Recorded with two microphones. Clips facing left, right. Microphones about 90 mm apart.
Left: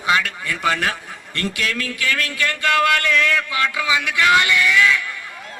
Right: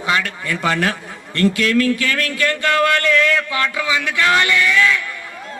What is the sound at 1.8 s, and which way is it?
A man's voice, 25° left (ahead or behind).